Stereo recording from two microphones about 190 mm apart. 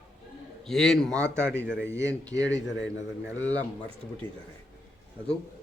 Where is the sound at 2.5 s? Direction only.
70° left (ahead or behind).